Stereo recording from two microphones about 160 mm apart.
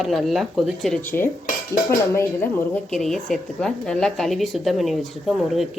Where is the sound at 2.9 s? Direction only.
Centre (ahead or behind).